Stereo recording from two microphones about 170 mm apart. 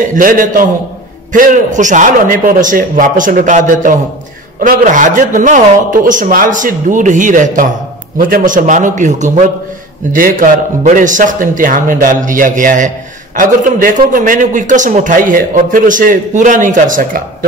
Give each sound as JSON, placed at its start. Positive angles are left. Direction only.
{"t": 0.1, "sound": "a man's voice", "side_deg": -55}